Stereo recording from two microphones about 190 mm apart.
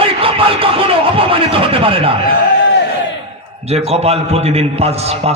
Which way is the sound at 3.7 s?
35° right (ahead or behind).